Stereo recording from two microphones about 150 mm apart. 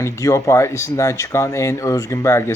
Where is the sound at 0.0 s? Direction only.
20° left (ahead or behind).